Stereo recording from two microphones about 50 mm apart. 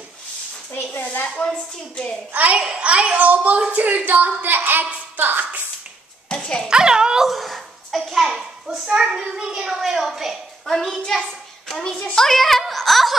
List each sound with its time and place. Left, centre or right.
1.2 s a woman's voice: left
2.3 s a child's voice: right
6.2 s a sound: centre
6.7 s speech: centre
7.2 s a sound: centre
8.8 s a child's voice: centre
11.1 s hands: centre
11.8 s a child's voice: centre
12.3 s speech: centre